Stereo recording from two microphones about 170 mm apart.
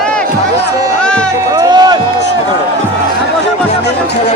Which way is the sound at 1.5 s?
25° right (ahead or behind).